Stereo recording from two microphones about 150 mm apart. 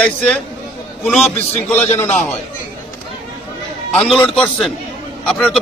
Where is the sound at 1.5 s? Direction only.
45° left (ahead or behind).